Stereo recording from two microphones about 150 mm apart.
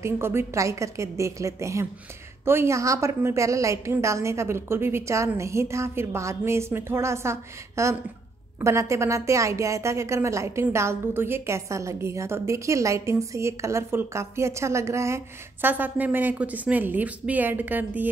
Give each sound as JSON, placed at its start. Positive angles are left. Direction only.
{"t": 0.0, "sound": "a woman's voice", "side_deg": -15}